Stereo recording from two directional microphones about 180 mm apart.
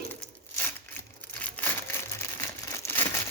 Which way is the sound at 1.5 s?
5° left (ahead or behind).